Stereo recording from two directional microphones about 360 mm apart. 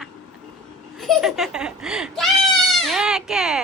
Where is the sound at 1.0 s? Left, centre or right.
Centre.